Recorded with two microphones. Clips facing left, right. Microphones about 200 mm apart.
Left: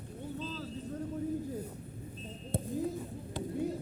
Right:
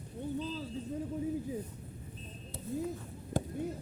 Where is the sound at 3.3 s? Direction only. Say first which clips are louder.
Right 4 dB; 45° right (ahead or behind).